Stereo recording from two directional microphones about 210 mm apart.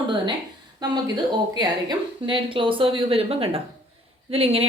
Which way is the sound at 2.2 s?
25° right (ahead or behind).